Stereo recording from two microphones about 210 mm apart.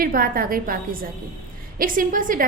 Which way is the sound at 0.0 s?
40° right (ahead or behind).